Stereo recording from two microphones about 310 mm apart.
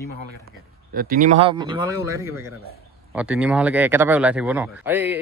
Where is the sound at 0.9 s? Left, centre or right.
Right.